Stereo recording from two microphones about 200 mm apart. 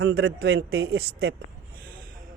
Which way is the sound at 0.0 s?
90° right.